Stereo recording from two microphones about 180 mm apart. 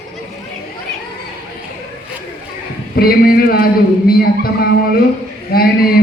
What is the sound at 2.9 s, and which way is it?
A man's voice, 55° left (ahead or behind).